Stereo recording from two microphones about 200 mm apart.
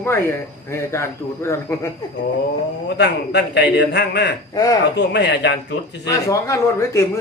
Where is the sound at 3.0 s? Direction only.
60° left (ahead or behind).